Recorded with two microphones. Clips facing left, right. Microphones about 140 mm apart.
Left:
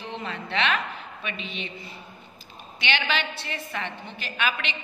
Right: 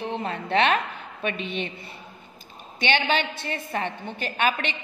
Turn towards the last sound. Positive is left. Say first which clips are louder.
# right 4 dB
turn(degrees=-45)  # may be behind; listen again after turning